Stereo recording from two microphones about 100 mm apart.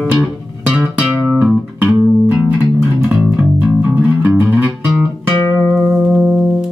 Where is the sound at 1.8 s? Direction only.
15° right (ahead or behind).